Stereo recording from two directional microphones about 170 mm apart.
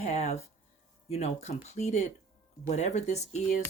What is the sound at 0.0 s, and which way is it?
Speech, 40° left (ahead or behind).